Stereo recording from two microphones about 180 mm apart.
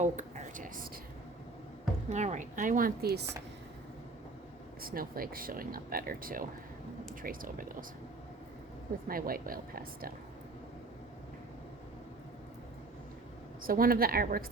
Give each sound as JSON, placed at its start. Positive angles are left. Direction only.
{"t": 0.0, "sound": "a sound", "side_deg": -45}
{"t": 2.0, "sound": "speech", "side_deg": -40}
{"t": 4.8, "sound": "speech", "side_deg": -55}
{"t": 9.0, "sound": "speech", "side_deg": -55}
{"t": 13.6, "sound": "speech", "side_deg": -55}